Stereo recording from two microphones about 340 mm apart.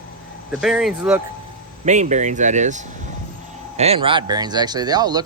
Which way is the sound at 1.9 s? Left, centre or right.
Right.